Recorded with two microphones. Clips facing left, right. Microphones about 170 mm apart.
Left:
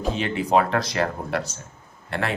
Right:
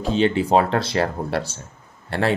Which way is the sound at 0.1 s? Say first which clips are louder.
Right 4 dB; 30° right (ahead or behind).